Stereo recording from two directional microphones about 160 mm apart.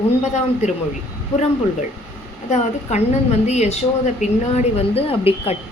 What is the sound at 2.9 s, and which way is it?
A woman's voice, 45° left (ahead or behind).